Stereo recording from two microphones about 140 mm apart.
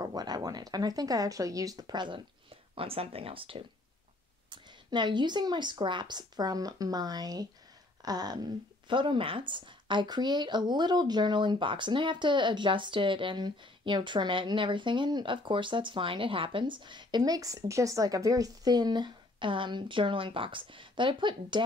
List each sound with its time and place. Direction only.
0.0 s a woman's voice: 30° right (ahead or behind)
8.0 s a sound: 30° right (ahead or behind)
8.8 s a woman's voice: 35° right (ahead or behind)